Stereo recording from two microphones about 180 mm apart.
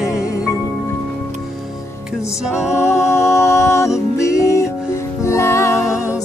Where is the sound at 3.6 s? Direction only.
15° left (ahead or behind).